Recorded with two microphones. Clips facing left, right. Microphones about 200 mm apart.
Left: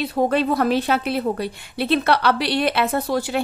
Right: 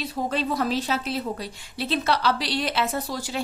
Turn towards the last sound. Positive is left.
turn(degrees=60)  # may be behind; listen again after turning